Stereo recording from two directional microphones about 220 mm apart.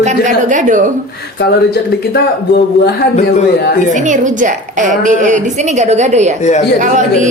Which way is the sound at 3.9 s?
35° right (ahead or behind).